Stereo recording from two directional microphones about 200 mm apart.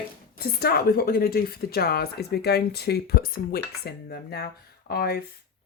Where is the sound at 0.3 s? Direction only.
50° left (ahead or behind).